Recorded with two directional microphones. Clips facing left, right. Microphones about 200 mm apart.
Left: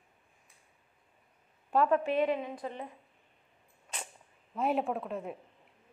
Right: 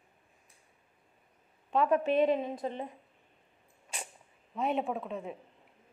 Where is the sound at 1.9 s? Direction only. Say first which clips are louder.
Right 2 dB; 20° right (ahead or behind).